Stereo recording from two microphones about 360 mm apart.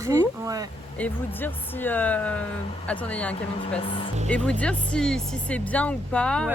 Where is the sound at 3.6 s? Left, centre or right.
Centre.